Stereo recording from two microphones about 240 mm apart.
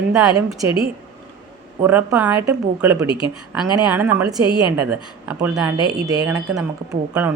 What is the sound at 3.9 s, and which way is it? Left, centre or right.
Speech, centre.